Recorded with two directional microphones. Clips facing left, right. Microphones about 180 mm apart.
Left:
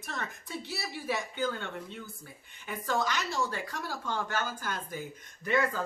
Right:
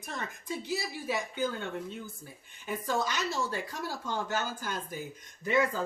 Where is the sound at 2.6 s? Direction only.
15° right (ahead or behind).